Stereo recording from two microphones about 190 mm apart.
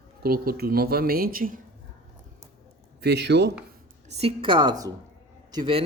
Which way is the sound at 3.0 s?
60° right (ahead or behind).